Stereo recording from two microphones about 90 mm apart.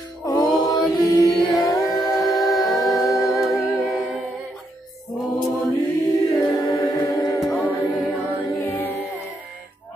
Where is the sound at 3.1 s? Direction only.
35° left (ahead or behind).